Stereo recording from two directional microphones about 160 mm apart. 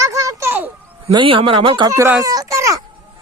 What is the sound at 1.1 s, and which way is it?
Speech, 30° right (ahead or behind).